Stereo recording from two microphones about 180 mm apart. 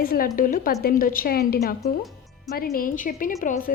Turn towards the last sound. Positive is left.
turn(degrees=50)  # may be behind; listen again after turning